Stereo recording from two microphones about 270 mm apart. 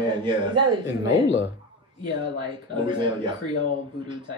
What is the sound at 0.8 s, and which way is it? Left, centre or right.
Speech, left.